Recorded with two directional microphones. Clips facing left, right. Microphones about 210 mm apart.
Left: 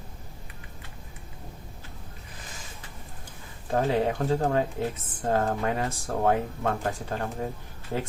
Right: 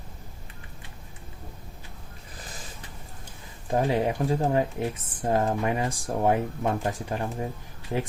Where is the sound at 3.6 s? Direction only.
15° right (ahead or behind).